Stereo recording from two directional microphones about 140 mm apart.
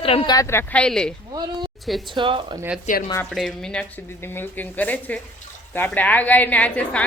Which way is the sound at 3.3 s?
Centre (ahead or behind).